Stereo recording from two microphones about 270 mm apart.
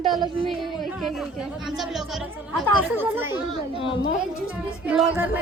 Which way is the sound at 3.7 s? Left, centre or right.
Centre.